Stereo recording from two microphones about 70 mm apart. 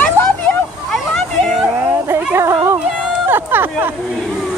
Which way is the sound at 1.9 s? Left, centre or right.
Right.